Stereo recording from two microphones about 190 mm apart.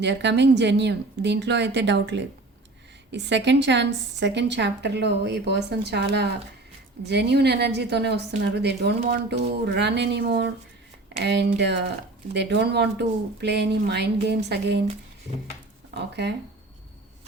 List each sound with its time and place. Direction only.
0.0 s a woman's voice: 65° right (ahead or behind)
16.0 s speech: 65° right (ahead or behind)